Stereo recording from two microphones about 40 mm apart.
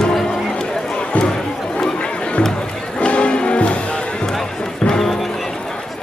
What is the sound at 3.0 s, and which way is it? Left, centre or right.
Music, left.